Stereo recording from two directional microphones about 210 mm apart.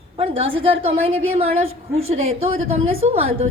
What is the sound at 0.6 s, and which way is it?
A woman's voice, 25° right (ahead or behind).